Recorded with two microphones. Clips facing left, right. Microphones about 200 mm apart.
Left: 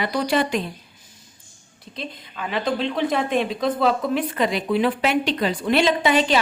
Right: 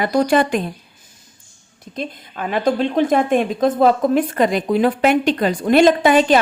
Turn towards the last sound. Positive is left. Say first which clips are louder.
# right 6 dB
turn(degrees=-50)  # may be behind; listen again after turning